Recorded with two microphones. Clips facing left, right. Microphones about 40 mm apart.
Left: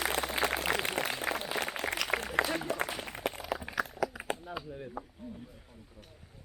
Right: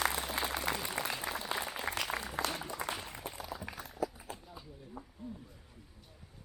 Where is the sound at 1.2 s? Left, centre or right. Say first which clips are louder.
Left 5 dB; left.